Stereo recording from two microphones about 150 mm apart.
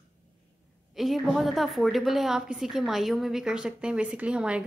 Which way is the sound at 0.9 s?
Centre (ahead or behind).